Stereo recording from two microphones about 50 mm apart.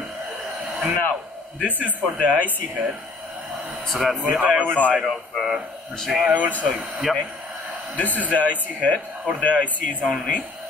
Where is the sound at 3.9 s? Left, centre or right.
Centre.